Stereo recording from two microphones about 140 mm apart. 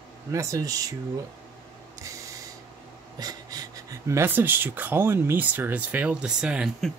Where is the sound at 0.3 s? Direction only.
20° right (ahead or behind).